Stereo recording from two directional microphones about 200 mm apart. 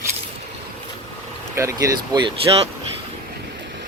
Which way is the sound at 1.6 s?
15° right (ahead or behind).